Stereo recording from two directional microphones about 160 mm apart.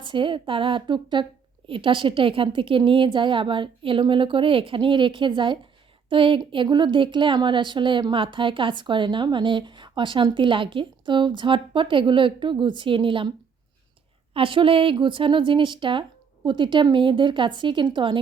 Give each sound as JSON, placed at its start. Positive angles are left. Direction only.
{"t": 0.0, "sound": "a woman's voice", "side_deg": -30}
{"t": 14.3, "sound": "a woman's voice", "side_deg": -35}